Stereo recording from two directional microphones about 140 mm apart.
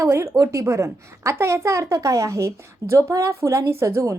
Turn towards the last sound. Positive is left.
turn(degrees=-20)  # may be behind; listen again after turning